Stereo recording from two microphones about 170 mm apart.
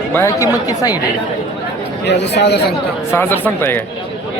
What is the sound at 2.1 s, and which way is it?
Speech, 90° left.